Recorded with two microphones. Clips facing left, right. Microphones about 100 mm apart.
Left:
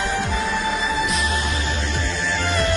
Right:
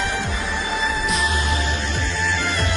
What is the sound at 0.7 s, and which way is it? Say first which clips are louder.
Music: left 1 dB; centre (ahead or behind).